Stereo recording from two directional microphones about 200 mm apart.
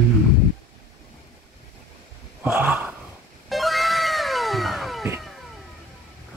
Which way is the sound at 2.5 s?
10° right (ahead or behind).